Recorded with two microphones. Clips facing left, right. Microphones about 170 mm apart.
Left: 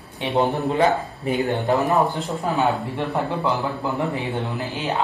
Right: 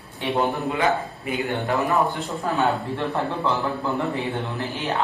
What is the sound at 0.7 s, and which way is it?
Speech, 35° left (ahead or behind).